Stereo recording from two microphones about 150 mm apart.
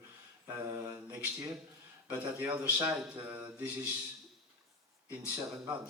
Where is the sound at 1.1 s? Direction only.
15° right (ahead or behind).